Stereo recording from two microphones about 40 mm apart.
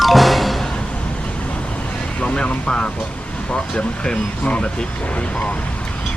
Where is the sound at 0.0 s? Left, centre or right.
Centre.